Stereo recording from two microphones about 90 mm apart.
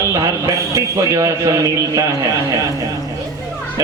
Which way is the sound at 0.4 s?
40° right (ahead or behind).